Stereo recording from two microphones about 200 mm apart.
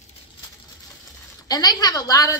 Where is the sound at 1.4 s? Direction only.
20° left (ahead or behind).